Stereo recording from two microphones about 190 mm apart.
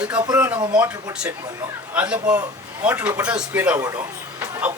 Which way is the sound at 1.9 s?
5° right (ahead or behind).